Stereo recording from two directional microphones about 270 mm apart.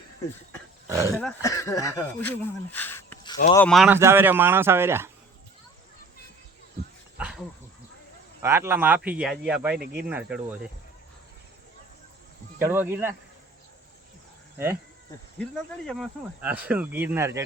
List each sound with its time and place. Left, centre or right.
0.9 s speech: centre
1.1 s speech: centre
7.2 s dog: centre
8.4 s speech: centre
9.7 s speech: right
10.1 s speech: centre
12.6 s speech: centre
15.4 s speech: centre